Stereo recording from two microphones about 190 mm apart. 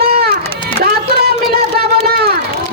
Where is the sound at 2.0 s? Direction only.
55° right (ahead or behind).